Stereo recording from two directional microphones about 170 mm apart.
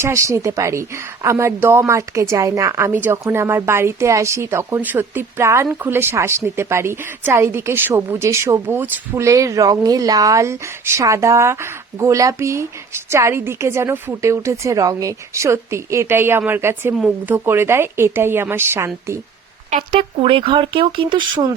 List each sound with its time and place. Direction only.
0.0 s a woman's voice: 15° right (ahead or behind)
19.7 s speech: 35° right (ahead or behind)